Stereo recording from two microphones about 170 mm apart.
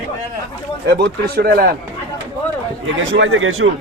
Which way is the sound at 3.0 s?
90° right.